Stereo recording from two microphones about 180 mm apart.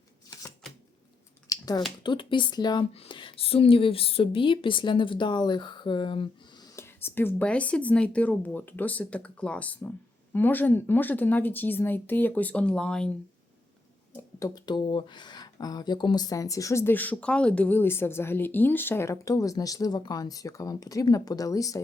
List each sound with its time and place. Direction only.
1.5 s finger snapping: 20° left (ahead or behind)
2.0 s a woman's voice: 25° left (ahead or behind); by 13.1 s 5° left (ahead or behind)
14.3 s a woman's voice: 20° left (ahead or behind)